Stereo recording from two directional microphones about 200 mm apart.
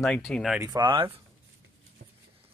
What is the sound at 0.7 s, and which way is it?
Speech, 25° right (ahead or behind).